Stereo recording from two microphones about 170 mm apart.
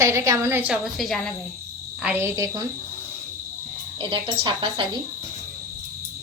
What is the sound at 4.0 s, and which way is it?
Speech, 30° right (ahead or behind).